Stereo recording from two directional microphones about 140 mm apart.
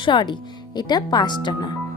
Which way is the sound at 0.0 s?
35° left (ahead or behind).